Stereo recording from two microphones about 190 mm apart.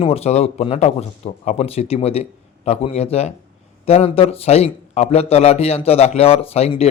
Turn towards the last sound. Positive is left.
turn(degrees=30)  # may be behind; listen again after turning